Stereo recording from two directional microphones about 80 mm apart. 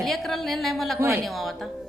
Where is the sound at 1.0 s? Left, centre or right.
Right.